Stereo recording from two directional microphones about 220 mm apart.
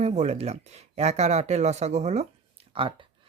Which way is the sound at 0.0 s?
30° right (ahead or behind).